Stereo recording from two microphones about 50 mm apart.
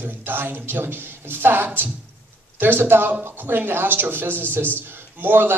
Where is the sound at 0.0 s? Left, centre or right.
Right.